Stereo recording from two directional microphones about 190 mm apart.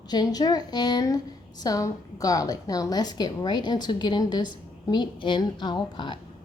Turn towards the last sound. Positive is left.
turn(degrees=25)  # may be behind; listen again after turning